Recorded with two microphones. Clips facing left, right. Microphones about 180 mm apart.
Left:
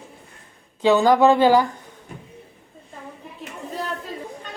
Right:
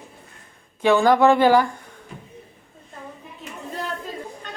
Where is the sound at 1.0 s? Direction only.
15° left (ahead or behind).